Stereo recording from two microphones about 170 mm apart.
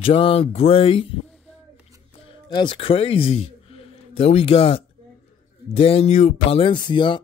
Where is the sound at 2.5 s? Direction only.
30° left (ahead or behind).